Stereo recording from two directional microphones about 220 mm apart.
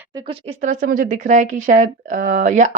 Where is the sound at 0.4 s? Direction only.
35° right (ahead or behind).